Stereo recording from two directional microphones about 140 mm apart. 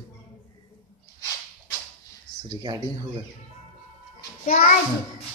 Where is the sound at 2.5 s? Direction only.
30° right (ahead or behind).